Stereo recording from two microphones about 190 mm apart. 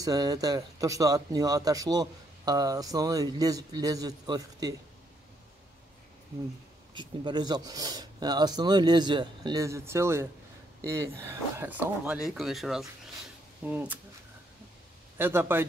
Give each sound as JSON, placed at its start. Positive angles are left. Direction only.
{"t": 0.0, "sound": "speech", "side_deg": -20}
{"t": 6.9, "sound": "speech", "side_deg": -25}
{"t": 15.1, "sound": "speech", "side_deg": -10}